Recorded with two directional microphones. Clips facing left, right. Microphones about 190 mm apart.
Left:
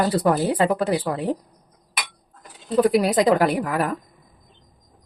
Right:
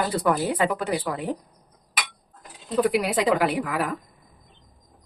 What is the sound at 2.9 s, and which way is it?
Speech, 40° left (ahead or behind).